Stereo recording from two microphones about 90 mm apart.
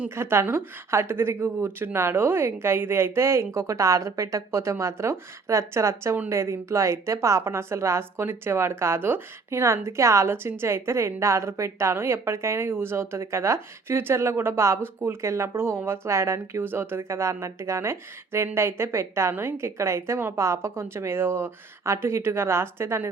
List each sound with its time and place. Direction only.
0.2 s a woman's voice: 25° right (ahead or behind)